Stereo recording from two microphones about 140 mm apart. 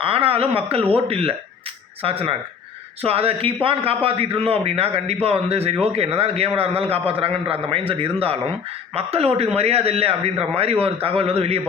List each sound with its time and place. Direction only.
0.0 s a man's voice: 40° right (ahead or behind)